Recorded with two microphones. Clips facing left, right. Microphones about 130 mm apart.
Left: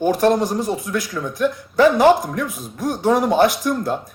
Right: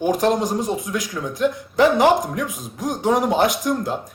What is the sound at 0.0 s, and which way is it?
Speech, 15° right (ahead or behind).